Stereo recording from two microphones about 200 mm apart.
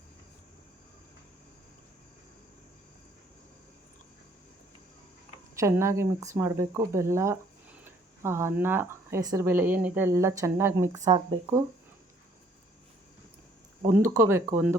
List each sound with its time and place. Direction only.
5.5 s speech: 15° right (ahead or behind)
13.9 s speech: 15° right (ahead or behind)